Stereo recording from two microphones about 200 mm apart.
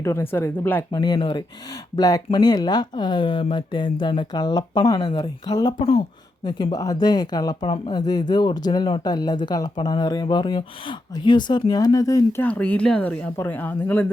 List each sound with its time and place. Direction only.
0.0 s speech: 10° left (ahead or behind)
0.9 s speech: 20° left (ahead or behind)
12.5 s speech: 5° left (ahead or behind)